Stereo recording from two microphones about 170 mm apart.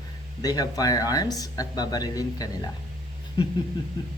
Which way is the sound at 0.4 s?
20° left (ahead or behind).